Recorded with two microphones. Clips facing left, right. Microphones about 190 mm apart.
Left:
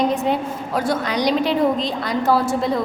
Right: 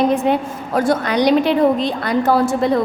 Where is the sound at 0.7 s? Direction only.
50° right (ahead or behind).